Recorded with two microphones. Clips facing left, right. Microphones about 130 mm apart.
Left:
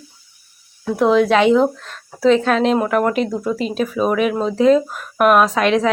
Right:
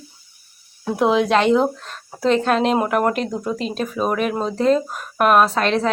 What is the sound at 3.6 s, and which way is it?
Speech, 10° left (ahead or behind).